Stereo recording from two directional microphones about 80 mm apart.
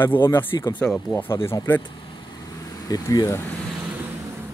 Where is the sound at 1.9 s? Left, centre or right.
Left.